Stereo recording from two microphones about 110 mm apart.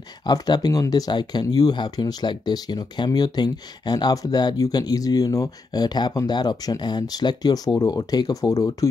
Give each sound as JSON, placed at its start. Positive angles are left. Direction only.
{"t": 0.3, "sound": "speech", "side_deg": 35}